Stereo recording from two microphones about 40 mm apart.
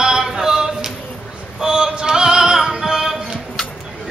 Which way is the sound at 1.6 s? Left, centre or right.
Centre.